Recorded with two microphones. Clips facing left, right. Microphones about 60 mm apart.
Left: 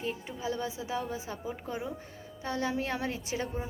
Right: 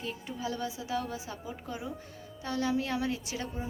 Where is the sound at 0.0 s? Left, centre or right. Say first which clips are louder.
Left 1 dB; left.